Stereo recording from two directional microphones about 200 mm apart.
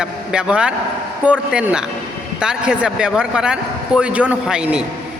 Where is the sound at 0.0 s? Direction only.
5° right (ahead or behind).